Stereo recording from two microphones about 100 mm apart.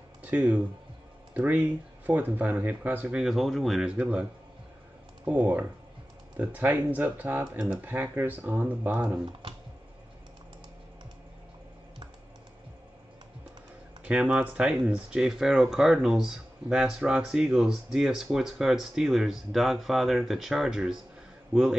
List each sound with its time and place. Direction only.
0.2 s speech: 15° right (ahead or behind)
3.9 s speech: 10° right (ahead or behind)
14.1 s speech: 10° right (ahead or behind)
21.5 s a man's voice: 20° right (ahead or behind)